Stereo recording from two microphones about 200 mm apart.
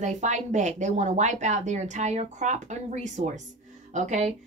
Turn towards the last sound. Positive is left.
turn(degrees=-35)  # may be behind; listen again after turning